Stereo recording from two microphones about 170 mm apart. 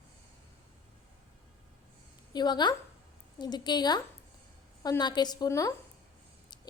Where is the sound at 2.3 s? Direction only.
25° left (ahead or behind).